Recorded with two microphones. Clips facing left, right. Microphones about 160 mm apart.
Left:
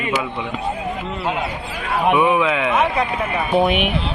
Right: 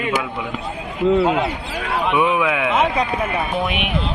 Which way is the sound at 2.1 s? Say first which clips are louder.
Even; 5° right (ahead or behind).